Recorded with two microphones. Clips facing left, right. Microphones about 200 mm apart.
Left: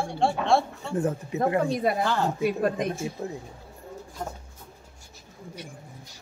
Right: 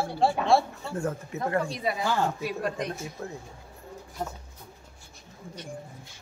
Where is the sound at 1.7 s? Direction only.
50° left (ahead or behind).